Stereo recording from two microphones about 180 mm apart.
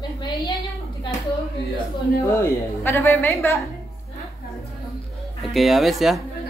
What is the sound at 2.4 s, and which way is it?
A woman's voice, 15° left (ahead or behind).